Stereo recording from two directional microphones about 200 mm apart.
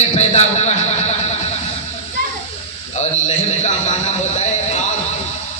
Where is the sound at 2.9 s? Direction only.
35° left (ahead or behind).